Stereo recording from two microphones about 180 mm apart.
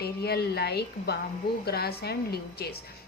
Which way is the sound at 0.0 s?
60° left (ahead or behind).